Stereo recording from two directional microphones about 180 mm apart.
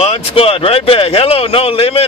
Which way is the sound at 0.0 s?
35° left (ahead or behind).